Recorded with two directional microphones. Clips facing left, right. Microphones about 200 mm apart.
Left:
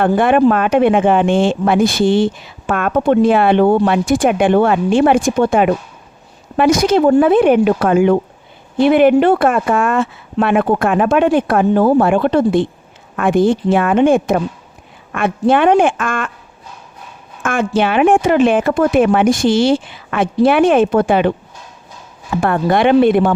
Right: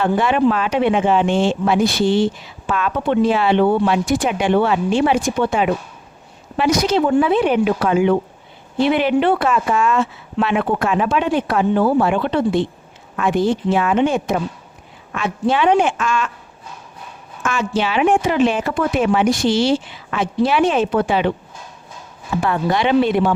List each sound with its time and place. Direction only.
0.2 s speech: 50° left (ahead or behind)
17.4 s speech: 55° left (ahead or behind)
22.4 s speech: 55° left (ahead or behind)